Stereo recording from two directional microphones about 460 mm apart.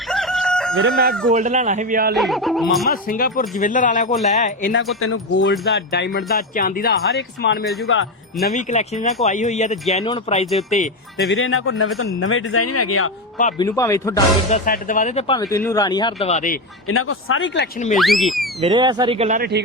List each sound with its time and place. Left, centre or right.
0.1 s crowing: centre
0.8 s speech: centre
2.1 s speech: centre
2.9 s speech: centre
4.9 s speech: left
11.3 s speech: left
13.4 s speech: centre
14.6 s speech: centre
17.9 s speech: centre